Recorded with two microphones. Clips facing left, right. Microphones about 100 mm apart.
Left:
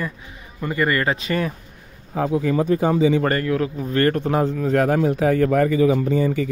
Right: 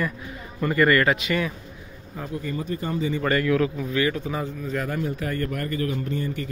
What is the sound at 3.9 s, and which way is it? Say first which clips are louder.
Speech: left 6 dB; 55° left (ahead or behind).